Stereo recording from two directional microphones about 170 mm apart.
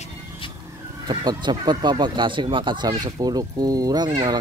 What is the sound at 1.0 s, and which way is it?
Speech, 25° right (ahead or behind).